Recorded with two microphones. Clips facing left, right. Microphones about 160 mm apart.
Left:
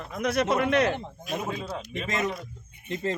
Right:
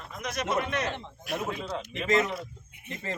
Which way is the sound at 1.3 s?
20° left (ahead or behind).